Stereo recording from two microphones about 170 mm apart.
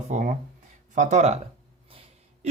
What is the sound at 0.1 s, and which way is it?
Speech, 50° right (ahead or behind).